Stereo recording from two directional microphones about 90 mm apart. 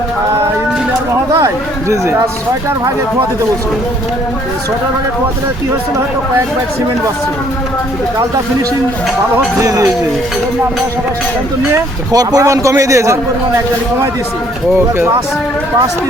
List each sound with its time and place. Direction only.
1.3 s speech: 35° right (ahead or behind)
9.6 s a man's voice: 40° right (ahead or behind)
12.1 s speech: 45° right (ahead or behind)
12.5 s a man's voice: 35° right (ahead or behind)